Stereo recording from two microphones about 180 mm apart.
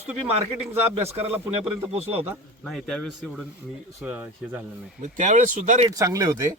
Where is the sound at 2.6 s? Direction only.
5° left (ahead or behind).